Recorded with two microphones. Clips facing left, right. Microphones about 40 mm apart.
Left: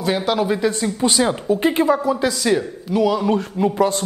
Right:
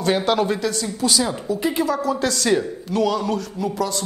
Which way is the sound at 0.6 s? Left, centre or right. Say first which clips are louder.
Left 4 dB; left.